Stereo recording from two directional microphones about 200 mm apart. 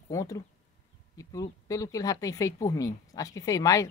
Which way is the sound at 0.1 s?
15° left (ahead or behind).